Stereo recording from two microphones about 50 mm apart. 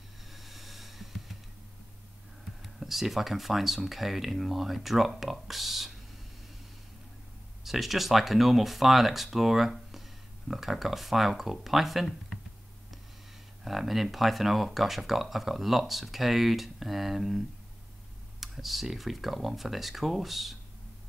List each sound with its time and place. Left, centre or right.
0.3 s a sound: centre
2.6 s speech: centre
7.6 s speech: centre
13.7 s speech: centre
18.4 s speech: centre